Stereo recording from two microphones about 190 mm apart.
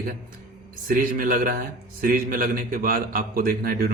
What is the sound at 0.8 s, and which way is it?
A man's voice, 45° right (ahead or behind).